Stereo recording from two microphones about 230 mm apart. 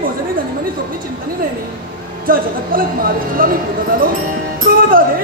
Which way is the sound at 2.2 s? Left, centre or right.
Right.